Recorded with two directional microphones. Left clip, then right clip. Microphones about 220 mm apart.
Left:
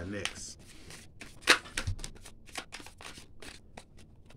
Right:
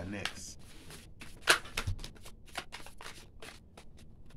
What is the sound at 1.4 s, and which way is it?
Shuffling cards, 35° left (ahead or behind).